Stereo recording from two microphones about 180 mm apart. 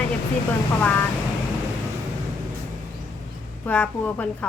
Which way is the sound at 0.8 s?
10° left (ahead or behind).